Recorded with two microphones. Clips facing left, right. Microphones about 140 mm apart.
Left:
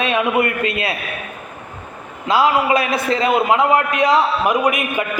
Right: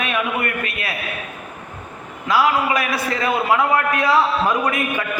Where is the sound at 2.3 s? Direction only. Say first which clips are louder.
Left 3 dB; 25° left (ahead or behind).